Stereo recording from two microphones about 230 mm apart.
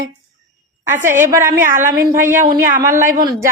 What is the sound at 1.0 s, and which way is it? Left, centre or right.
A woman's voice, centre.